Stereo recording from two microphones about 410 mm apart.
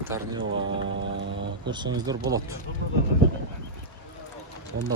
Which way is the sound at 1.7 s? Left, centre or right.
Centre.